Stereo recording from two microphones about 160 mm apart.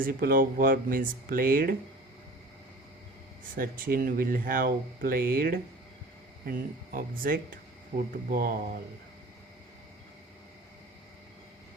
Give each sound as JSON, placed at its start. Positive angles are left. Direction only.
{"t": 0.0, "sound": "speech", "side_deg": -65}
{"t": 3.5, "sound": "speech", "side_deg": -60}